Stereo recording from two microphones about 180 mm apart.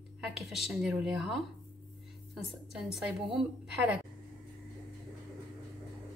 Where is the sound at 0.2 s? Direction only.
Centre (ahead or behind).